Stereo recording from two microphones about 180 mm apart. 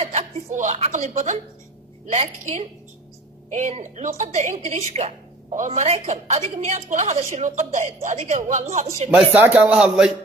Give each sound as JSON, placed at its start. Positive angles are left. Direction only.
{"t": 0.0, "sound": "a woman's voice", "side_deg": -40}
{"t": 9.1, "sound": "a man's voice", "side_deg": -5}